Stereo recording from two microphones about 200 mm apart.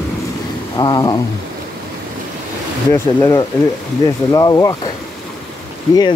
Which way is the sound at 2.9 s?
20° left (ahead or behind).